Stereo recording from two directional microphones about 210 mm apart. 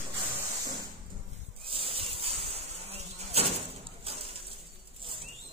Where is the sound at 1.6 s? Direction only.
25° right (ahead or behind).